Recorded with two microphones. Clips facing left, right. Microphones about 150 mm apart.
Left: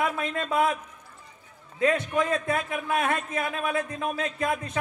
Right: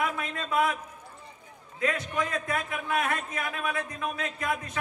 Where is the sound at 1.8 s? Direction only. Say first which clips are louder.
Left 5 dB; 25° left (ahead or behind).